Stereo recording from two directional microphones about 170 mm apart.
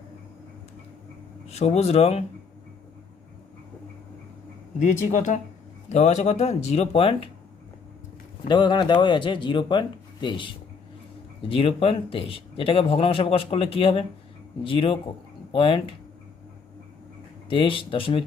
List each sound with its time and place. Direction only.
1.5 s speech: 40° left (ahead or behind)
4.8 s speech: 45° left (ahead or behind)
8.4 s speech: 25° left (ahead or behind)
17.5 s speech: 30° left (ahead or behind)